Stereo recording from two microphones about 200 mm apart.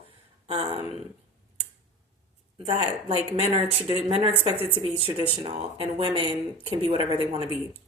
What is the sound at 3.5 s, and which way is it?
Speech, 25° right (ahead or behind).